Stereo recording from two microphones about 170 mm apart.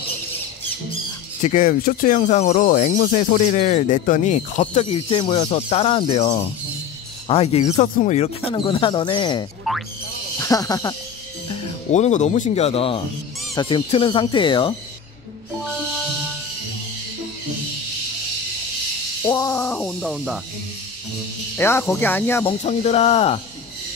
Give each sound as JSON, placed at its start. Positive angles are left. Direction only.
{"t": 1.4, "sound": "speech", "side_deg": 50}
{"t": 11.4, "sound": "speech", "side_deg": 40}
{"t": 19.2, "sound": "speech", "side_deg": 20}
{"t": 21.5, "sound": "speech", "side_deg": 15}
{"t": 22.4, "sound": "speech", "side_deg": 35}